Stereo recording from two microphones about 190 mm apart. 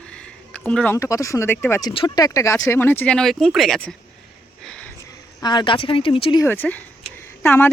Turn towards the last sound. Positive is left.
turn(degrees=10)  # may be behind; listen again after turning